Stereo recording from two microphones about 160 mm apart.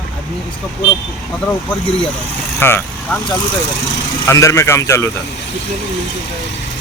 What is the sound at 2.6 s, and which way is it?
Speech, 15° left (ahead or behind).